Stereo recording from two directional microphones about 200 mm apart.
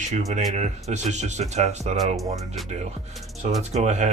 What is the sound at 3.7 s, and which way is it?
Speech, 35° right (ahead or behind).